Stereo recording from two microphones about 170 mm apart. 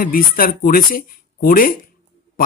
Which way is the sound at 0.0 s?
55° left (ahead or behind).